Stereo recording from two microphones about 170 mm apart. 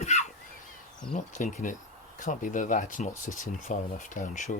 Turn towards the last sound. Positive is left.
turn(degrees=45)  # may be behind; listen again after turning